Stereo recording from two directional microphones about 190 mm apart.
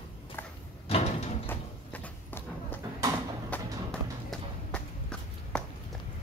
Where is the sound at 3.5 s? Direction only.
5° left (ahead or behind).